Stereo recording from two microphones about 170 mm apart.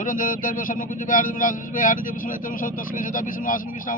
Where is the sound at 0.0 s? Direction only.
50° left (ahead or behind).